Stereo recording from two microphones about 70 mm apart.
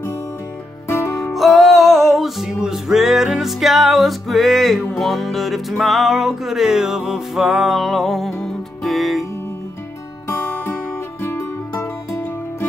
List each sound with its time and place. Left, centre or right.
0.8 s music: left
1.3 s music: centre
10.2 s music: left